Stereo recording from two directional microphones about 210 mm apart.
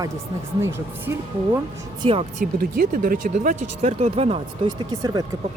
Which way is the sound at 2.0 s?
30° right (ahead or behind).